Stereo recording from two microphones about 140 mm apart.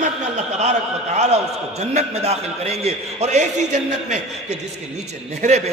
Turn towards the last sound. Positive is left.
turn(degrees=-50)  # may be behind; listen again after turning